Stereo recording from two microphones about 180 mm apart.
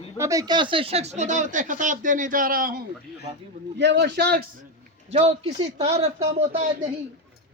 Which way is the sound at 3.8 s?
75° right (ahead or behind).